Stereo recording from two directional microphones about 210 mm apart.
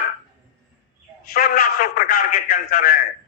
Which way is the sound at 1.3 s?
45° left (ahead or behind).